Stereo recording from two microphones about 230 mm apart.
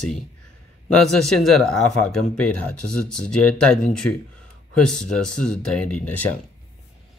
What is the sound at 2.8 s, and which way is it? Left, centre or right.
Speech, left.